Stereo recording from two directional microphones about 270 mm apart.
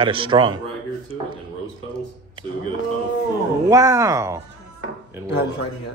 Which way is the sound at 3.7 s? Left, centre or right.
Centre.